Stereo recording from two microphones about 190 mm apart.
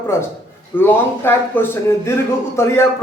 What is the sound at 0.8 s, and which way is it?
A man's voice, 10° left (ahead or behind).